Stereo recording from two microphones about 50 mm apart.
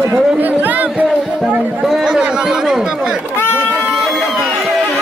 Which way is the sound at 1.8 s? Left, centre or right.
Centre.